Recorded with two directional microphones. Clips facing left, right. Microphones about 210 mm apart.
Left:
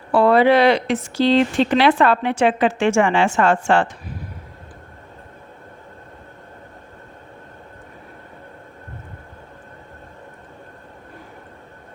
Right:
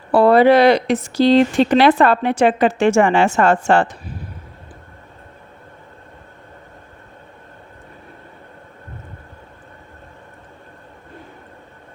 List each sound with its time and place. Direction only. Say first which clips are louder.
0.1 s speech: right 3 dB; 35° right (ahead or behind)